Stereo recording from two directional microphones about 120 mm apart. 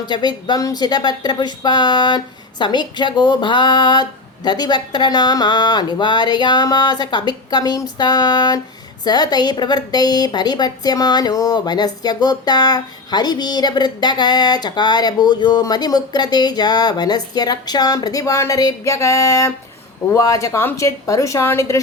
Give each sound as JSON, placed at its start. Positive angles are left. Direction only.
{"t": 0.0, "sound": "a woman's voice", "side_deg": 35}